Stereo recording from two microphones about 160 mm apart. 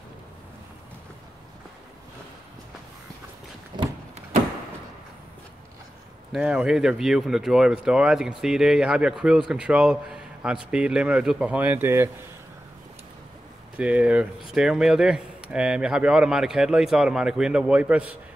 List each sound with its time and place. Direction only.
3.7 s a sound: 30° right (ahead or behind)
6.3 s speech: 5° right (ahead or behind)
13.7 s speech: 10° right (ahead or behind)